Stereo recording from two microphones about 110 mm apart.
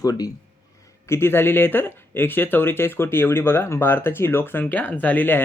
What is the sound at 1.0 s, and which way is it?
Speech, 25° left (ahead or behind).